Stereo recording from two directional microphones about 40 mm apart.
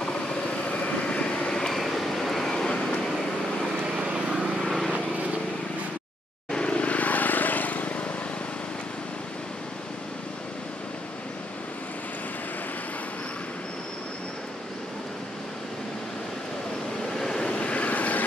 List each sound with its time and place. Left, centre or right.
0.7 s vehicle: left
1.7 s vehicle: centre
3.9 s vehicle: centre
6.5 s vehicle: left
17.1 s vehicle: centre
17.5 s vehicle: left